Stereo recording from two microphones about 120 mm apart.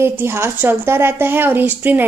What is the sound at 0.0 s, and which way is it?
A woman's voice, 20° right (ahead or behind).